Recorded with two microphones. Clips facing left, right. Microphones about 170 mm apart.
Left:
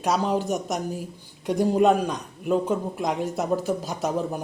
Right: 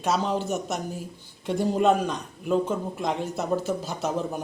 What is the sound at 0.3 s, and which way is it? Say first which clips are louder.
Speech: left 2 dB; 40° left (ahead or behind).